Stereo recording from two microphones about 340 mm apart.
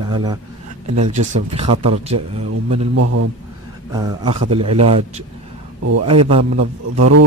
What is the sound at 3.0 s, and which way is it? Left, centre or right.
Speech, right.